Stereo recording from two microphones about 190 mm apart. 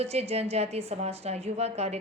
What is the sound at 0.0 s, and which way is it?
Speech, 35° right (ahead or behind).